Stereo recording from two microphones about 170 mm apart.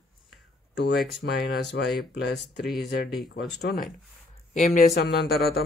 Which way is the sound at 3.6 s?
70° left (ahead or behind).